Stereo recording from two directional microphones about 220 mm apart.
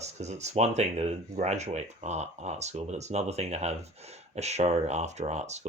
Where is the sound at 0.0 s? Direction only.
30° right (ahead or behind).